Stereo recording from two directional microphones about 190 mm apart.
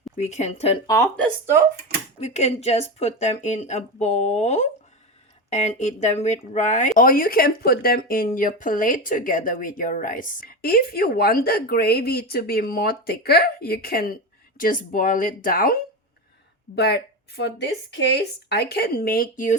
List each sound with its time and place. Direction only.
0.2 s speech: 35° left (ahead or behind)
0.9 s speech: 15° left (ahead or behind)
2.2 s speech: 35° left (ahead or behind)
16.7 s speech: 60° left (ahead or behind)